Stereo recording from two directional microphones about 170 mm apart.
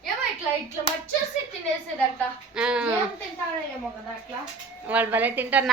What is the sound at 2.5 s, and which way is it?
Speech, 5° right (ahead or behind).